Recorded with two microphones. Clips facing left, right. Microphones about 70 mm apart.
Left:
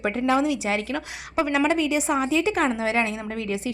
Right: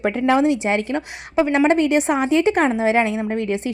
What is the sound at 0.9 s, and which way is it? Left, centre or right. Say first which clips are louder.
Speech: right 5 dB; right.